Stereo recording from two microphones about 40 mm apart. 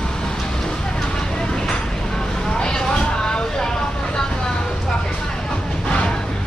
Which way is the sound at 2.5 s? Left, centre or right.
Centre.